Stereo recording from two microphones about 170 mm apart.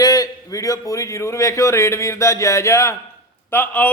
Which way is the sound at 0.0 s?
20° left (ahead or behind).